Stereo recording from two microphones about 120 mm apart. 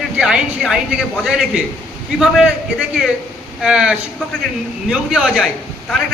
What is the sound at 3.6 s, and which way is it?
Speech, 5° right (ahead or behind).